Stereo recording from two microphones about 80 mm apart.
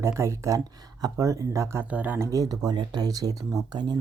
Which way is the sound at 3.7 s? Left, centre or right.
Right.